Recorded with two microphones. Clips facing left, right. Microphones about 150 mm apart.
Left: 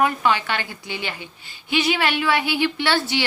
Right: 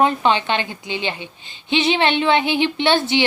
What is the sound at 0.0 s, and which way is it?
A woman's voice, 25° right (ahead or behind).